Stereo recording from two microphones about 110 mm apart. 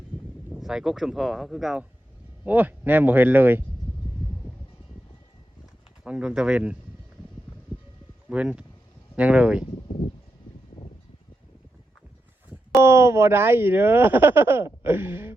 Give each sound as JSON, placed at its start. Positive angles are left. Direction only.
{"t": 0.6, "sound": "speech", "side_deg": -5}
{"t": 2.4, "sound": "speech", "side_deg": -15}
{"t": 6.1, "sound": "speech", "side_deg": -10}
{"t": 8.3, "sound": "speech", "side_deg": -10}
{"t": 12.7, "sound": "speech", "side_deg": -25}